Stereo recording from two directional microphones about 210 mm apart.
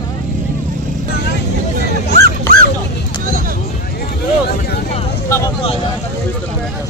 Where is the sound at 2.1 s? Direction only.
50° right (ahead or behind).